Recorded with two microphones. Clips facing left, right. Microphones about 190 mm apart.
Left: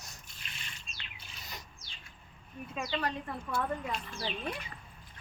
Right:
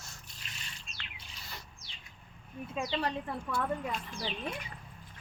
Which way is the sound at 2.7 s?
30° right (ahead or behind).